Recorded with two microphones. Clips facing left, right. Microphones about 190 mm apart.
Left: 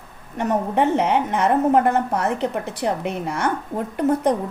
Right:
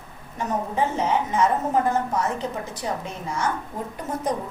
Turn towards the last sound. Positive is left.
turn(degrees=65)  # may be behind; listen again after turning